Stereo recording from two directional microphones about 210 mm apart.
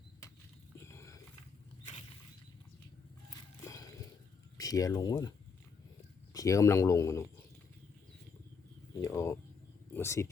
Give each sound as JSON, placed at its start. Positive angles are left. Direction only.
{"t": 0.9, "sound": "a sound", "side_deg": 15}
{"t": 3.2, "sound": "horse", "side_deg": 15}
{"t": 4.5, "sound": "speech", "side_deg": 15}
{"t": 6.3, "sound": "speech", "side_deg": 15}
{"t": 9.0, "sound": "a sound", "side_deg": 15}
{"t": 9.9, "sound": "speech", "side_deg": 10}